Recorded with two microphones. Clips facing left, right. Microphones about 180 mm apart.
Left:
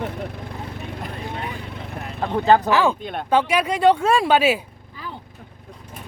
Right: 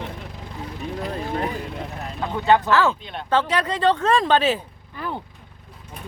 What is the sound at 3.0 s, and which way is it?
Speech, 50° left (ahead or behind).